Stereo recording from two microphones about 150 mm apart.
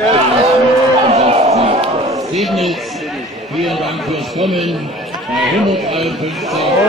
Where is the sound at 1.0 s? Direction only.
40° right (ahead or behind).